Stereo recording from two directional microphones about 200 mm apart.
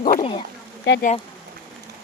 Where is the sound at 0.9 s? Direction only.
60° left (ahead or behind).